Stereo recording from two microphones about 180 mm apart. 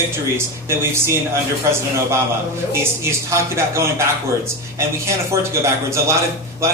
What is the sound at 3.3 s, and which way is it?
Speech, 15° right (ahead or behind).